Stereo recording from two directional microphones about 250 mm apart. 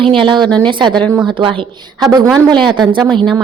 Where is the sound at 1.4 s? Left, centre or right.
Right.